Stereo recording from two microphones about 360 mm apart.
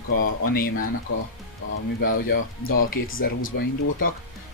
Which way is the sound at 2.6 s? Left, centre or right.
Left.